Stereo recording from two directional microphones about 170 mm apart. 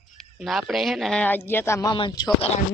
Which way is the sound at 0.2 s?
Centre (ahead or behind).